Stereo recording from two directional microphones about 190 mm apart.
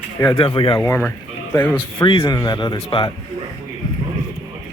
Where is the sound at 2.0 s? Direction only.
25° left (ahead or behind).